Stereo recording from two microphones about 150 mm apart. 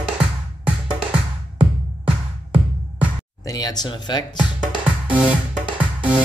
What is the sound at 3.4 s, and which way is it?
Speech, 25° left (ahead or behind).